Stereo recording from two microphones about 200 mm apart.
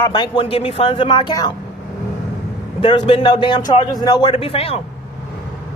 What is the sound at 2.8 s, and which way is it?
Speech, 25° left (ahead or behind).